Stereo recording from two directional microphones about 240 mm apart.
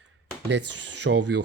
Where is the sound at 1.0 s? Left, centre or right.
Right.